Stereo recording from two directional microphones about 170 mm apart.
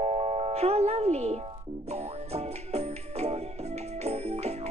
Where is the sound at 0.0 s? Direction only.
35° right (ahead or behind).